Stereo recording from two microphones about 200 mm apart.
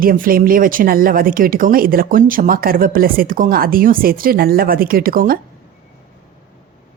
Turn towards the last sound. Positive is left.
turn(degrees=-45)  # may be behind; listen again after turning